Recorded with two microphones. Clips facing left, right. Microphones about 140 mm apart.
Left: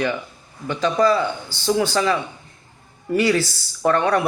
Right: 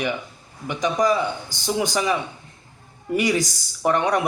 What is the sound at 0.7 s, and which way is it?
Speech, 15° right (ahead or behind).